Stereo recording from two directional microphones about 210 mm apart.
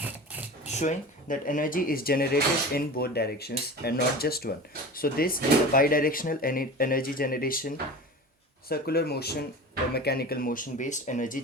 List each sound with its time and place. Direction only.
0.6 s speech: 35° left (ahead or behind)
8.7 s speech: 50° left (ahead or behind)